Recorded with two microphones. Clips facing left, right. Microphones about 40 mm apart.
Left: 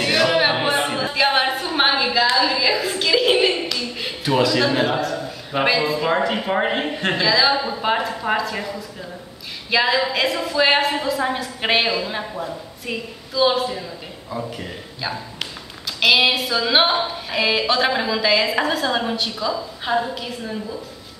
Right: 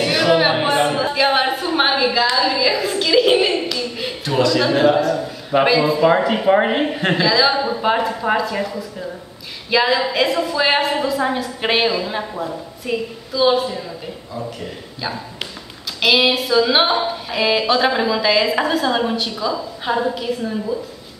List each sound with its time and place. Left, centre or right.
0.0 s a sound: centre
9.7 s a woman's voice: centre
15.0 s a woman's voice: centre